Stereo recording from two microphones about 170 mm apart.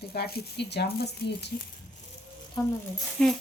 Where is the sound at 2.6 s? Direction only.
25° left (ahead or behind).